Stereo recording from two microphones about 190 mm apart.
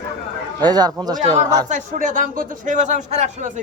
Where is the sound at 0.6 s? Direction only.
20° right (ahead or behind).